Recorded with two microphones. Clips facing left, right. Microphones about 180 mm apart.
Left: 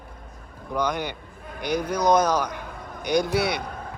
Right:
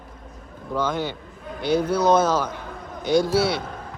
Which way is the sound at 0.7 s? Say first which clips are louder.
Right 1 dB; 15° left (ahead or behind).